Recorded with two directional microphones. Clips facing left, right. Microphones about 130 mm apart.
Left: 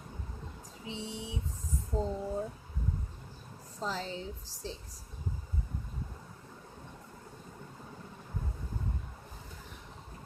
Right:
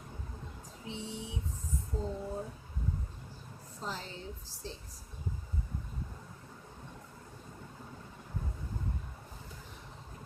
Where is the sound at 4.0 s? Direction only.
90° left.